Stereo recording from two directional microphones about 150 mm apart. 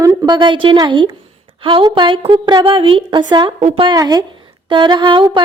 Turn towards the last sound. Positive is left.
turn(degrees=-30)  # may be behind; listen again after turning